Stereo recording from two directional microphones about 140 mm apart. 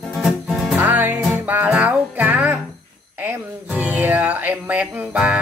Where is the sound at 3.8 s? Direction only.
10° right (ahead or behind).